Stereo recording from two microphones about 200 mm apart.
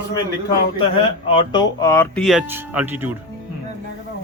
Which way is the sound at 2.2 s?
5° right (ahead or behind).